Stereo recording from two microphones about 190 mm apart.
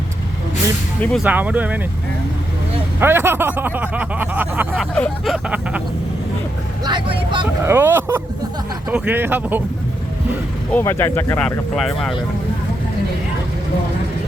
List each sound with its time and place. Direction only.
1.2 s speech: 10° right (ahead or behind)
3.0 s speech: 10° right (ahead or behind)
4.7 s a sound: 5° left (ahead or behind)
6.8 s speech: 25° right (ahead or behind)
7.6 s speech: 15° right (ahead or behind)
10.7 s speech: 10° left (ahead or behind)